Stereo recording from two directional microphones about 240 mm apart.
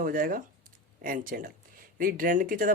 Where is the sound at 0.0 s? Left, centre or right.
Right.